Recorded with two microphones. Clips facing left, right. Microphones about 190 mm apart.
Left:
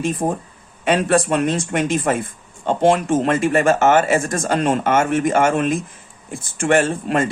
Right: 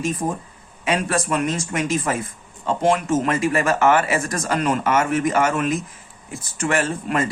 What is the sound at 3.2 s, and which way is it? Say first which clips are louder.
Speech: left 3 dB; 55° left (ahead or behind).